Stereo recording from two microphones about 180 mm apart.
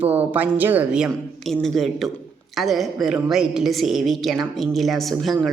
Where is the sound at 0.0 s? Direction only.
10° right (ahead or behind).